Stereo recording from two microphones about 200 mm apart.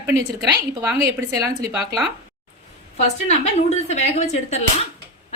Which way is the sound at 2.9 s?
35° left (ahead or behind).